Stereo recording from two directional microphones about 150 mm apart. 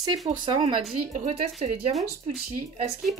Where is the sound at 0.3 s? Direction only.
40° right (ahead or behind).